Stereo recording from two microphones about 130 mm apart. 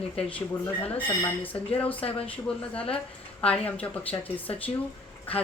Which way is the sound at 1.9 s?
45° left (ahead or behind).